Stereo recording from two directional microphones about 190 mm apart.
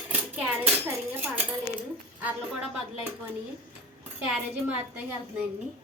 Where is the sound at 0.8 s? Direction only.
10° right (ahead or behind).